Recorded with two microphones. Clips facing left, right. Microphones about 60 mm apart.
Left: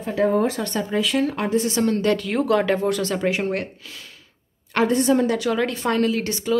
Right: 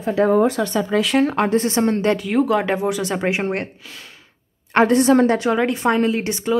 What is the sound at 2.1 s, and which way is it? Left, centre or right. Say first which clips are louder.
Speech: right 2 dB; centre.